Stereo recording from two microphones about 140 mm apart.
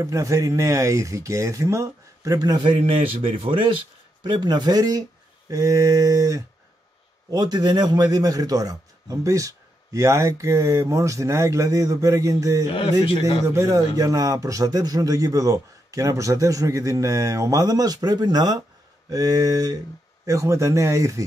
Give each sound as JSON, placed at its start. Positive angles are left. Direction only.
{"t": 0.0, "sound": "a man's voice", "side_deg": -25}